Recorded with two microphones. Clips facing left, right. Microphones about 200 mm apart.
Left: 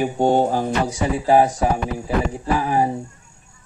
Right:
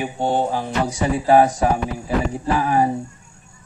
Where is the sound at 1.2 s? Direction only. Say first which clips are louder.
Right 1 dB; 20° left (ahead or behind).